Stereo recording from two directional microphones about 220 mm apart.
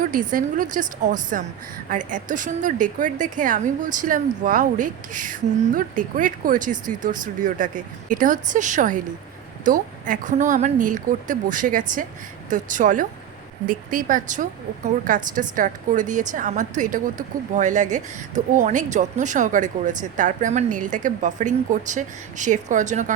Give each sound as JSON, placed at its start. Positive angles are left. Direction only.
{"t": 0.0, "sound": "a woman's voice", "side_deg": -35}